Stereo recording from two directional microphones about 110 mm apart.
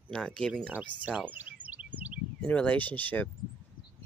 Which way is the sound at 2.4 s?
10° left (ahead or behind).